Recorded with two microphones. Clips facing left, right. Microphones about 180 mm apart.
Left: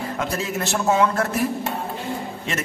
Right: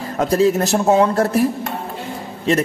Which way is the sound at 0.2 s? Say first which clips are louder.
Right 13 dB; 40° right (ahead or behind).